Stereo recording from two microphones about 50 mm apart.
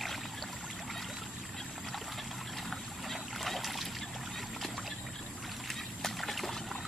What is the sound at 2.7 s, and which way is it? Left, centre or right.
Boat, centre.